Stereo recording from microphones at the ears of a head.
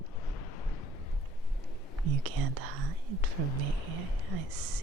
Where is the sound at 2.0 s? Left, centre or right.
Right.